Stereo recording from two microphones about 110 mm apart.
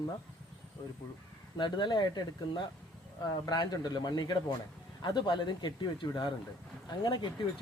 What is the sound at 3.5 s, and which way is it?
Speech, 40° left (ahead or behind).